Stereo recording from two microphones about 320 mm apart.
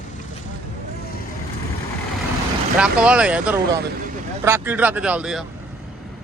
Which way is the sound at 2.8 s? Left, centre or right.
Centre.